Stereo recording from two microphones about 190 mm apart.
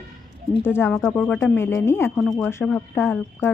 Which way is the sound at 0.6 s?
10° left (ahead or behind).